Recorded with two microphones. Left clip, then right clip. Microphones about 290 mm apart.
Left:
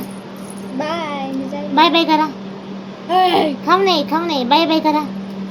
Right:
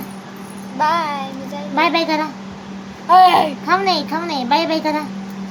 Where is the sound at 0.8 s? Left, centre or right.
Right.